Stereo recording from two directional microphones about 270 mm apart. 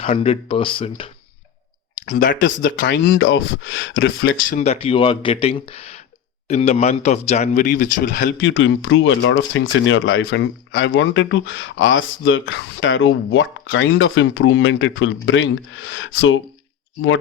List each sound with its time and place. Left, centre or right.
0.0 s speech: left
2.0 s speech: left
2.4 s speech: left
4.5 s speech: left